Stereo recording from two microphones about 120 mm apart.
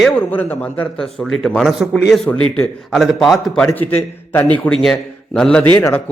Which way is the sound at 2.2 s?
10° left (ahead or behind).